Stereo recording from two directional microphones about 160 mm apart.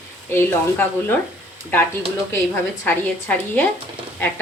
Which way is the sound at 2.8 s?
15° left (ahead or behind).